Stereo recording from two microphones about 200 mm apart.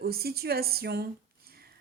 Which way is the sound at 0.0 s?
50° right (ahead or behind).